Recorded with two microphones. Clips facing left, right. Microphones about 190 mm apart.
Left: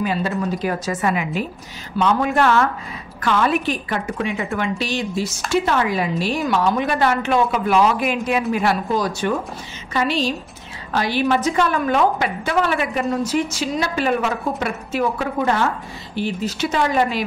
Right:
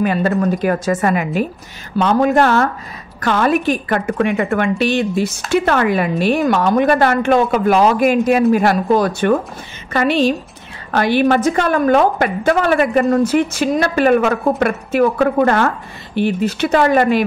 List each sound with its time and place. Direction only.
0.0 s a woman's voice: 55° right (ahead or behind)